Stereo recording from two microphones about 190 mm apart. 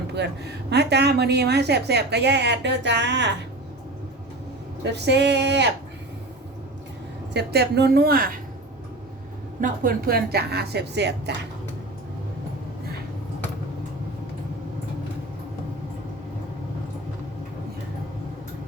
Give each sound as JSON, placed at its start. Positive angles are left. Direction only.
{"t": 0.1, "sound": "a woman's voice", "side_deg": -60}
{"t": 4.8, "sound": "a woman's voice", "side_deg": -65}
{"t": 7.3, "sound": "a woman's voice", "side_deg": -60}
{"t": 9.6, "sound": "a woman's voice", "side_deg": -45}